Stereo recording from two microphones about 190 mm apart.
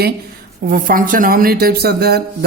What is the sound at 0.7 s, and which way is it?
Speech, 45° right (ahead or behind).